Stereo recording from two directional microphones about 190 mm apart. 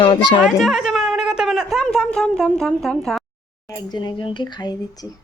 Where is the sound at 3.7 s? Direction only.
20° left (ahead or behind).